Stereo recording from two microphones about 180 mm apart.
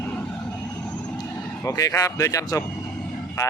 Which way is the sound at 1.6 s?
20° left (ahead or behind).